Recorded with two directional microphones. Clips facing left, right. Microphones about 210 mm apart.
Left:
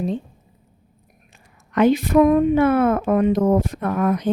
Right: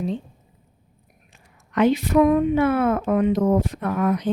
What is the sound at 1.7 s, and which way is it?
A woman's voice, 50° left (ahead or behind).